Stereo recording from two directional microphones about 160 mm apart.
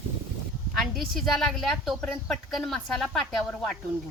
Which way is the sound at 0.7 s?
Centre (ahead or behind).